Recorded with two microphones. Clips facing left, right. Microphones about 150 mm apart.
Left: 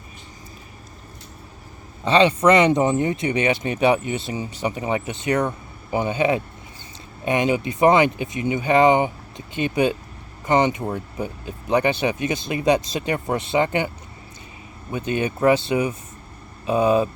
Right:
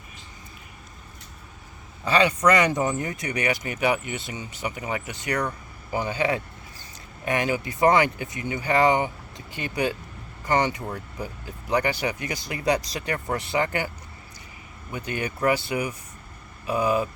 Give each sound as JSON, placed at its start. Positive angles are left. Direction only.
{"t": 2.0, "sound": "speech", "side_deg": 25}
{"t": 14.9, "sound": "speech", "side_deg": 25}